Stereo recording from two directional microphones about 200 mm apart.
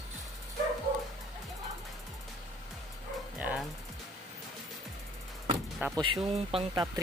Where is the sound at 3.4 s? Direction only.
10° right (ahead or behind).